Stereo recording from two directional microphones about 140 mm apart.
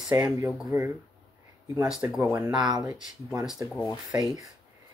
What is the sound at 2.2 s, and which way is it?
Speech, 25° right (ahead or behind).